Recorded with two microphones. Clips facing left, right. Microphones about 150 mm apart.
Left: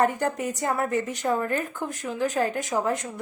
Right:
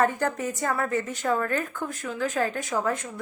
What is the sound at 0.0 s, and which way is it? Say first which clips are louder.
A woman's voice: left 1 dB; 15° left (ahead or behind).